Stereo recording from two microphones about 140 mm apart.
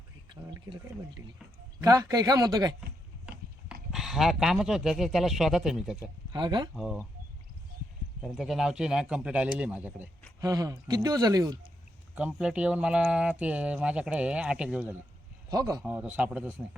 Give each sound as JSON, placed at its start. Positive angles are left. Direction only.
{"t": 1.8, "sound": "speech", "side_deg": -25}
{"t": 3.7, "sound": "speech", "side_deg": 0}
{"t": 6.3, "sound": "speech", "side_deg": -35}
{"t": 6.7, "sound": "a man's voice", "side_deg": 0}
{"t": 8.2, "sound": "a man's voice", "side_deg": -5}
{"t": 10.4, "sound": "speech", "side_deg": -25}
{"t": 12.1, "sound": "speech", "side_deg": -5}
{"t": 15.4, "sound": "a man's voice", "side_deg": -25}
{"t": 15.9, "sound": "speech", "side_deg": -10}